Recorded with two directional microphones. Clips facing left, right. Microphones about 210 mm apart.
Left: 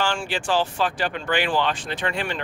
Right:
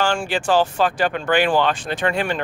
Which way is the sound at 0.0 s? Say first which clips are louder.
Right 5 dB; 45° right (ahead or behind).